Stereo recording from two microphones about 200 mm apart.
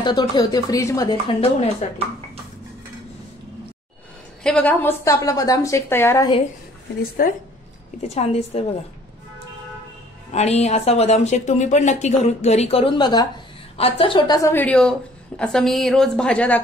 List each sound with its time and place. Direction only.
0.0 s a woman's voice: 20° left (ahead or behind)
4.4 s a woman's voice: 5° left (ahead or behind)
7.2 s a woman's voice: 45° left (ahead or behind)
8.0 s speech: 35° left (ahead or behind)
10.3 s a woman's voice: 35° left (ahead or behind); by 16.6 s 5° left (ahead or behind)